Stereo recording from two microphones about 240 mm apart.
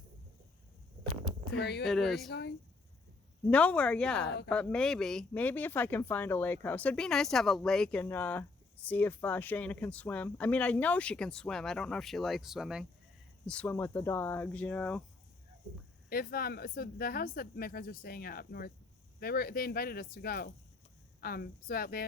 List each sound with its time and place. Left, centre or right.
1.5 s speech: left
1.8 s speech: centre
3.4 s speech: centre
16.0 s speech: left